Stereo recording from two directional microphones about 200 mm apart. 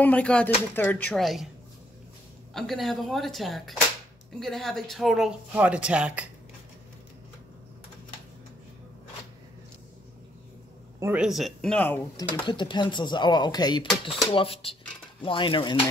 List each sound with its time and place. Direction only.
0.0 s speech: 5° left (ahead or behind)
2.5 s speech: centre (ahead or behind)
11.0 s speech: 10° right (ahead or behind); by 12.3 s 10° left (ahead or behind)
12.4 s speech: 25° left (ahead or behind)